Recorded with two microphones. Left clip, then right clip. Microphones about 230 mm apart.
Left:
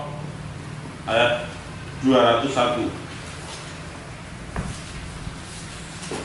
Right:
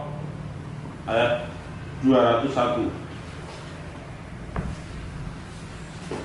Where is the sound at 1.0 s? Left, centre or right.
Centre.